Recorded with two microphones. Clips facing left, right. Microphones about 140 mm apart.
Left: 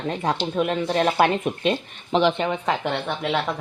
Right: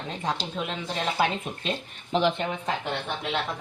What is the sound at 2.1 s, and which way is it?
Speech, 90° left.